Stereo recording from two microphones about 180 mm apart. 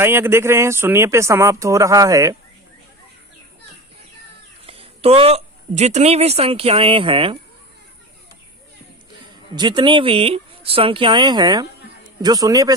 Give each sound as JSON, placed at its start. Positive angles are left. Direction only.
{"t": 0.0, "sound": "speech", "side_deg": -15}
{"t": 4.6, "sound": "speech", "side_deg": -30}
{"t": 9.6, "sound": "speech", "side_deg": -25}